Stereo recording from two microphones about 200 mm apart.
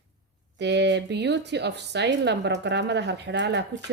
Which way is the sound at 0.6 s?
60° right (ahead or behind).